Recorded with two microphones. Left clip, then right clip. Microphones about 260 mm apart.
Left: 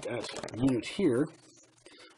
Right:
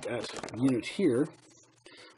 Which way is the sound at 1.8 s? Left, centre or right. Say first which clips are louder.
Right 2 dB; centre.